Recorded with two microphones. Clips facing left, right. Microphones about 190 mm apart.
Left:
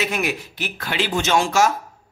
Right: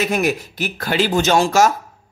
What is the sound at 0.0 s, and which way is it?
A man's voice, 40° right (ahead or behind).